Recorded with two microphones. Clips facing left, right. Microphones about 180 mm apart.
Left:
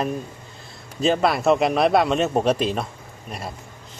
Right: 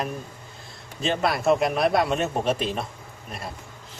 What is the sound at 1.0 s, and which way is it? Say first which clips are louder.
A man's voice: left 4 dB; centre (ahead or behind).